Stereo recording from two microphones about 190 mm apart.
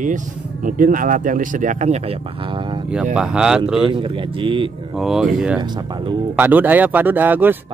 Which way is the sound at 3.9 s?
25° right (ahead or behind).